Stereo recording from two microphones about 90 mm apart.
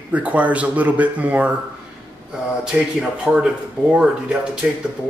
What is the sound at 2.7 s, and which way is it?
Speech, 10° right (ahead or behind).